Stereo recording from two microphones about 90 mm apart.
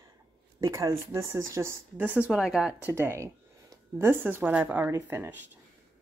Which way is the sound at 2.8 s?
30° right (ahead or behind).